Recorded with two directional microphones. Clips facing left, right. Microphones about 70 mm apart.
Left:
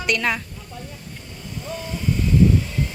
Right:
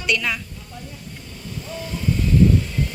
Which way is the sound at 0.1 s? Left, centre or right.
Left.